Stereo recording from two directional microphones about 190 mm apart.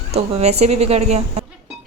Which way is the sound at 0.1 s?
35° right (ahead or behind).